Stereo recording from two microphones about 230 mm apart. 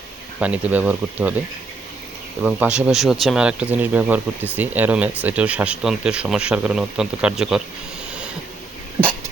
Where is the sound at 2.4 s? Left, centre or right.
Centre.